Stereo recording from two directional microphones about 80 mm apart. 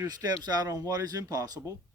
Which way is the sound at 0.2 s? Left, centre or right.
Right.